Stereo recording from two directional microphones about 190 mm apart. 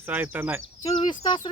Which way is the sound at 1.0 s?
25° left (ahead or behind).